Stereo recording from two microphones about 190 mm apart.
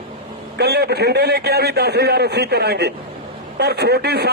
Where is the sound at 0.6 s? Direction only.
60° right (ahead or behind).